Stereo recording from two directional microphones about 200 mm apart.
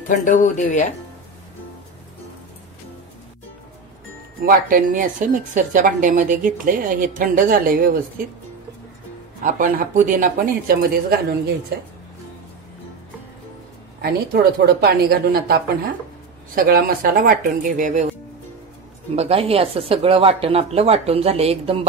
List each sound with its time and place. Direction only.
0.1 s speech: 40° left (ahead or behind)
4.4 s a woman's voice: 45° right (ahead or behind)
9.4 s speech: 40° right (ahead or behind)
14.0 s speech: 50° right (ahead or behind)
19.1 s speech: 30° right (ahead or behind)